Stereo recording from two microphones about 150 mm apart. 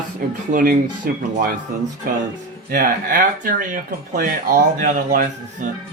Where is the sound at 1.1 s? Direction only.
75° right (ahead or behind).